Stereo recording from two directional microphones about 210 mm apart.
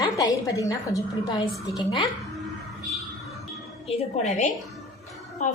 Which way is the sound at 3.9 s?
30° left (ahead or behind).